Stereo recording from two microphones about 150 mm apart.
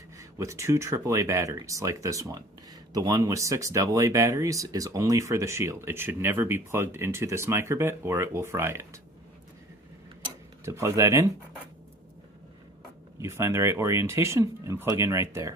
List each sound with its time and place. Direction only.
0.2 s speech: 20° right (ahead or behind)
10.7 s speech: 20° right (ahead or behind)
13.1 s speech: 20° right (ahead or behind)